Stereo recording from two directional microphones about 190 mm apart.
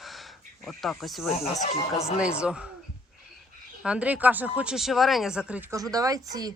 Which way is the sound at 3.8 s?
5° right (ahead or behind).